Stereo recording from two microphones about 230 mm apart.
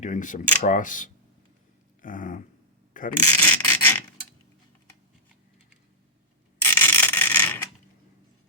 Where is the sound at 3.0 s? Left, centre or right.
Left.